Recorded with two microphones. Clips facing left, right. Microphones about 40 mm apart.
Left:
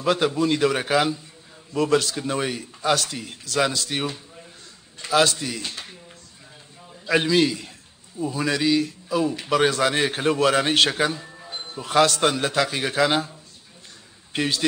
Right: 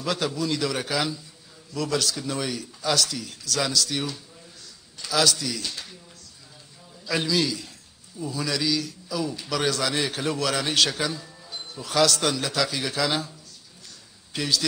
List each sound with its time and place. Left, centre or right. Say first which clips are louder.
0.0 s a man's voice: left 6 dB; left
7.1 s a man's voice: left 5 dB; left
11.2 s music: left 5 dB; left
11.5 s a man's voice: left 5 dB; left
14.3 s a man's voice: left 2 dB; left